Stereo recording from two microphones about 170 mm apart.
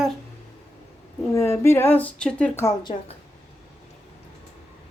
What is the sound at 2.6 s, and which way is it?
Speech, 20° left (ahead or behind).